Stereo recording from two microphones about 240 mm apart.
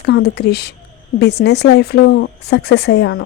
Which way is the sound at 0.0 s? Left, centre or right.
Left.